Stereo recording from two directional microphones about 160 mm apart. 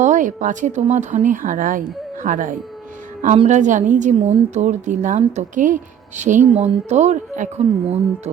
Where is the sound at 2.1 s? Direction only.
55° right (ahead or behind).